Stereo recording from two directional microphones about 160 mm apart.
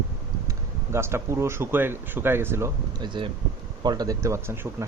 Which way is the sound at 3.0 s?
30° right (ahead or behind).